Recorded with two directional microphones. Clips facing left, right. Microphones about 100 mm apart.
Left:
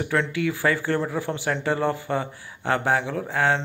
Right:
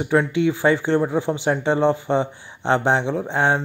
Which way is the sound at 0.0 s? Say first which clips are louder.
Right 5 dB; 20° right (ahead or behind).